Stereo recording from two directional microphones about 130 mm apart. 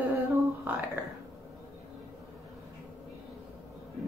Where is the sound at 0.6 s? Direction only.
15° right (ahead or behind).